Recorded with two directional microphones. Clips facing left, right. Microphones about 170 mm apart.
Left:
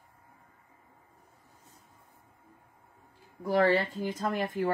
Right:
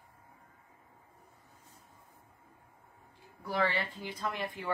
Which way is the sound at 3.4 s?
45° left (ahead or behind).